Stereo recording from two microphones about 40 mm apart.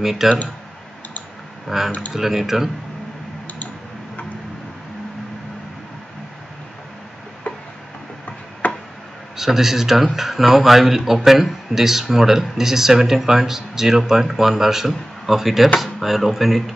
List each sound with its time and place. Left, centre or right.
0.0 s speech: centre
1.7 s speech: centre
7.5 s tick-tock: left
8.6 s a sound: left
9.4 s speech: centre